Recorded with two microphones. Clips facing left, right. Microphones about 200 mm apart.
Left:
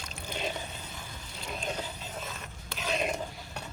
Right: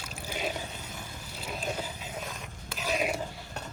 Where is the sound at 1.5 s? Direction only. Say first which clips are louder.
Right 1 dB; 5° right (ahead or behind).